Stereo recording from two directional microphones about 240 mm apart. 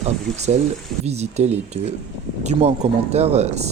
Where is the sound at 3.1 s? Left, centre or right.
Right.